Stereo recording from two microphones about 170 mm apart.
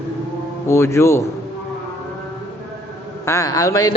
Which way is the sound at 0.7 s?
15° left (ahead or behind).